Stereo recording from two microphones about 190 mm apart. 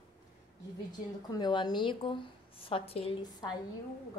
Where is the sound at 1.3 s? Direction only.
20° left (ahead or behind).